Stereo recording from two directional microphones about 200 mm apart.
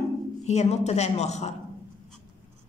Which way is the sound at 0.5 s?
30° left (ahead or behind).